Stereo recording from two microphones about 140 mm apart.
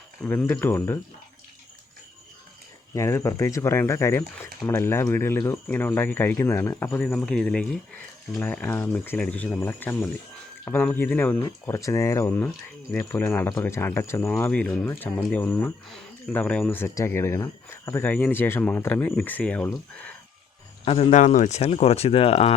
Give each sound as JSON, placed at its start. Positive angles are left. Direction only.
{"t": 0.3, "sound": "speech", "side_deg": 10}
{"t": 2.9, "sound": "speech", "side_deg": 20}
{"t": 20.8, "sound": "speech", "side_deg": 40}
{"t": 21.1, "sound": "speech", "side_deg": 65}